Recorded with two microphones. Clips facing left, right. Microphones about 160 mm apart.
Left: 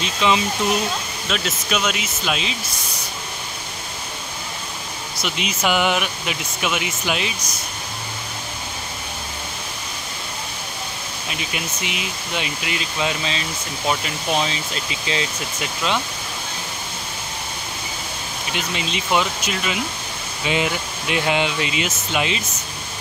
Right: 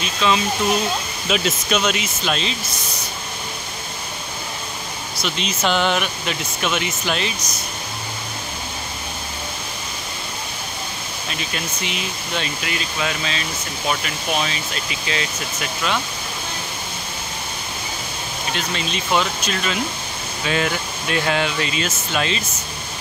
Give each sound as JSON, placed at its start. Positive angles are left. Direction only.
{"t": 0.0, "sound": "speech", "side_deg": 20}
{"t": 1.3, "sound": "speech", "side_deg": 0}
{"t": 5.2, "sound": "speech", "side_deg": 10}
{"t": 11.2, "sound": "speech", "side_deg": 15}
{"t": 18.5, "sound": "speech", "side_deg": 15}